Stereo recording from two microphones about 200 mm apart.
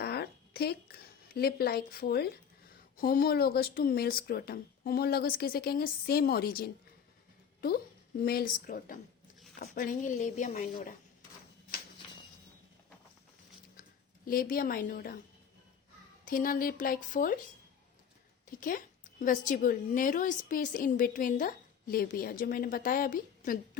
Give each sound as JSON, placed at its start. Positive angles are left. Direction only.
{"t": 0.0, "sound": "a woman's voice", "side_deg": 55}
{"t": 8.2, "sound": "a woman's voice", "side_deg": 50}
{"t": 14.3, "sound": "a woman's voice", "side_deg": 45}
{"t": 16.2, "sound": "a woman's voice", "side_deg": 45}
{"t": 18.5, "sound": "a woman's voice", "side_deg": 40}